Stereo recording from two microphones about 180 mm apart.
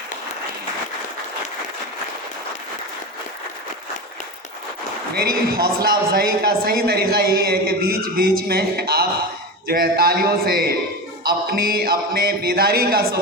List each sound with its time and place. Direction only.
5.1 s a man's voice: 55° right (ahead or behind)